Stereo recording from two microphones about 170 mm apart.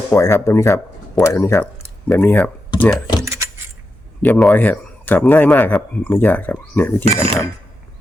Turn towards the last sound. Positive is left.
turn(degrees=-35)  # may be behind; listen again after turning